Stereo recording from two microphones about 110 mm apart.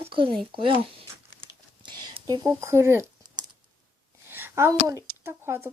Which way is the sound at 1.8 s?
45° right (ahead or behind).